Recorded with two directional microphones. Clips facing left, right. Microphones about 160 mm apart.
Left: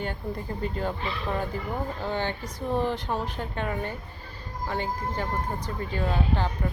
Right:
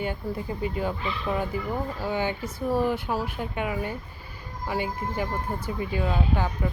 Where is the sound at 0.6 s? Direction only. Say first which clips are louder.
Right 1 dB; 10° right (ahead or behind).